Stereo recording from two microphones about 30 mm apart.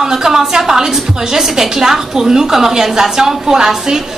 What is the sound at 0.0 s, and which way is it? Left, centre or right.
A woman's voice, centre.